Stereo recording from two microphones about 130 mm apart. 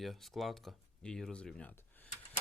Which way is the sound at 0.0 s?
Centre (ahead or behind).